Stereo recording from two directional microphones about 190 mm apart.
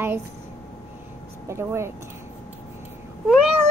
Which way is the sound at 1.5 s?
15° right (ahead or behind).